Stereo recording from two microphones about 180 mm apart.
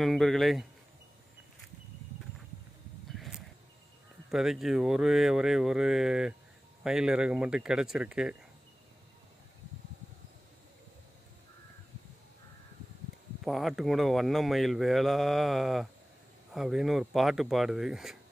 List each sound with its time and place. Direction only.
0.0 s speech: centre (ahead or behind)
3.1 s a sound: centre (ahead or behind)
4.3 s speech: centre (ahead or behind)
13.4 s speech: centre (ahead or behind)